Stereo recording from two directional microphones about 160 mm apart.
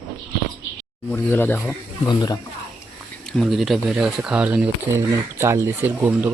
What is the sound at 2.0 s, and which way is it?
Speech, 25° left (ahead or behind).